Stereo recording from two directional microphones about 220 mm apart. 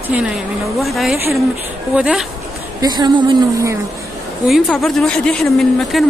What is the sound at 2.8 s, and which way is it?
Speech, 20° right (ahead or behind).